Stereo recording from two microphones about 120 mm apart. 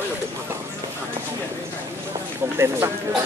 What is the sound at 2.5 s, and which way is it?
Speech, 20° right (ahead or behind).